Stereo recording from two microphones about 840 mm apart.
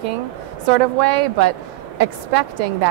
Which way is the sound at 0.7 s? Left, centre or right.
Right.